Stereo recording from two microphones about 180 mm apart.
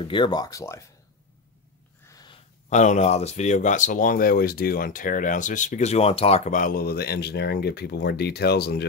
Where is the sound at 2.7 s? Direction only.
40° left (ahead or behind).